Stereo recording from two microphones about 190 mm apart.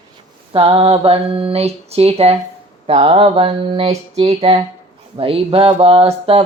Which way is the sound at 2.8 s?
30° right (ahead or behind).